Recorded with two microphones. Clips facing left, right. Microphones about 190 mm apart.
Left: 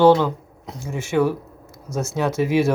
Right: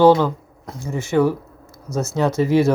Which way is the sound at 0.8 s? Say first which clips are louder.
Right 2 dB; 10° left (ahead or behind).